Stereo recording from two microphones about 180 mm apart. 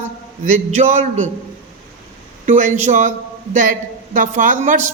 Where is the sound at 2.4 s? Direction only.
40° right (ahead or behind).